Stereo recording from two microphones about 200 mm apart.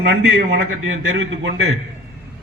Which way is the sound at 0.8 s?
75° right (ahead or behind).